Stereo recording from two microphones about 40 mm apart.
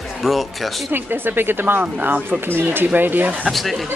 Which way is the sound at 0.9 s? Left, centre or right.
Right.